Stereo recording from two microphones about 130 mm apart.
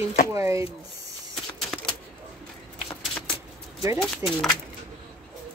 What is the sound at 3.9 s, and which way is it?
Speech, centre (ahead or behind).